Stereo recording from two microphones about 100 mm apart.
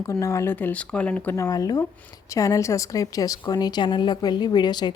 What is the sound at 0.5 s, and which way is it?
Speech, 15° left (ahead or behind).